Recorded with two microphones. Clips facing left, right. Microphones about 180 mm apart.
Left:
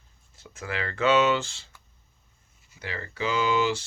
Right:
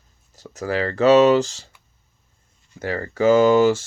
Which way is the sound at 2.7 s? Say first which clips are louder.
Right 11 dB; 45° right (ahead or behind).